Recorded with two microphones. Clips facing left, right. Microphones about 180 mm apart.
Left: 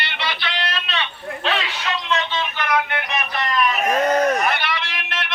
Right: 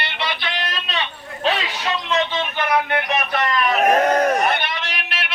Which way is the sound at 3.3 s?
60° right (ahead or behind).